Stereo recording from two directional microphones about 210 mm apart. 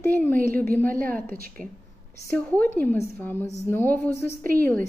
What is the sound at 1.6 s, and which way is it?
A woman's voice, 5° left (ahead or behind).